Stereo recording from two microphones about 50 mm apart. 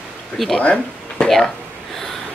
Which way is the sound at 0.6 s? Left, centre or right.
Left.